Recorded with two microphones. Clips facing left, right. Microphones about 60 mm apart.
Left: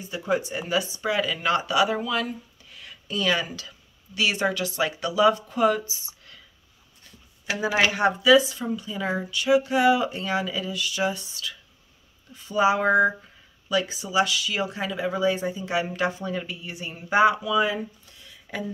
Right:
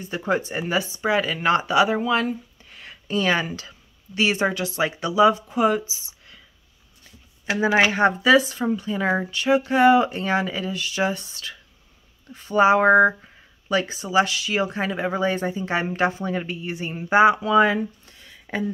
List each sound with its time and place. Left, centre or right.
0.2 s speech: right; by 5.9 s centre
5.9 s speech: left
7.4 s speech: right
17.4 s speech: right
18.2 s a sound: right